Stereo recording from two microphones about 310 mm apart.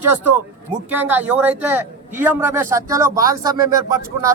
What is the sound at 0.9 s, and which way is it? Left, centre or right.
Speech, centre.